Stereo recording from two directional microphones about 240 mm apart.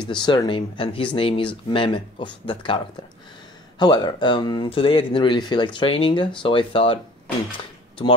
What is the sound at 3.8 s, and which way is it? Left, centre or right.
Speech, centre.